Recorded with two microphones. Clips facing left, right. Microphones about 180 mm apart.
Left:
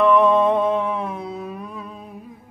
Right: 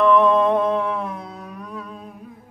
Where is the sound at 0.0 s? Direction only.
Centre (ahead or behind).